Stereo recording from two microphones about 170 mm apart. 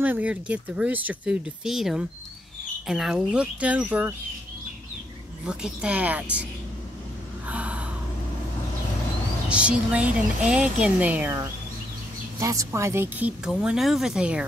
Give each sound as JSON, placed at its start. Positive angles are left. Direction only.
{"t": 0.0, "sound": "speech", "side_deg": -10}
{"t": 5.4, "sound": "speech", "side_deg": -5}
{"t": 7.4, "sound": "gasp", "side_deg": -10}
{"t": 9.5, "sound": "speech", "side_deg": -5}